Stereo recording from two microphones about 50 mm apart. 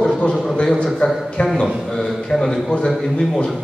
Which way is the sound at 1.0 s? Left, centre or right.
Left.